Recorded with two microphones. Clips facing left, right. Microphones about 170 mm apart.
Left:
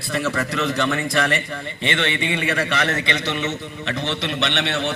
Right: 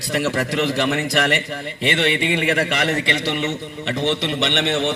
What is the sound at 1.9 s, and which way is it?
A man's voice, 15° right (ahead or behind).